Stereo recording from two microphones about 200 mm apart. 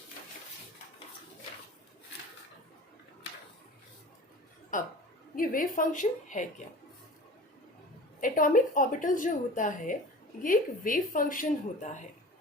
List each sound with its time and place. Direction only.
5.4 s a woman's voice: 45° left (ahead or behind)
8.2 s a woman's voice: 40° left (ahead or behind)